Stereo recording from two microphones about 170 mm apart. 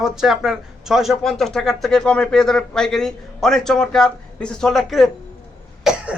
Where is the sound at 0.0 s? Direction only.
5° right (ahead or behind).